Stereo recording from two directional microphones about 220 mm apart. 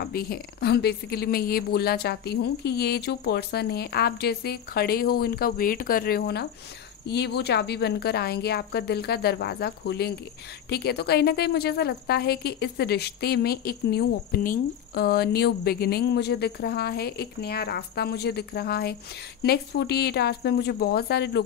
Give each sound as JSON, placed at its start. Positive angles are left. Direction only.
{"t": 0.0, "sound": "a woman's voice", "side_deg": 45}